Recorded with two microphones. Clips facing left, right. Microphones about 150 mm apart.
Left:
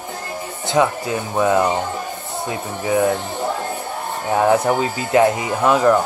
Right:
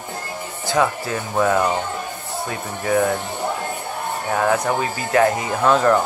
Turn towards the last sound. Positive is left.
turn(degrees=10)  # may be behind; listen again after turning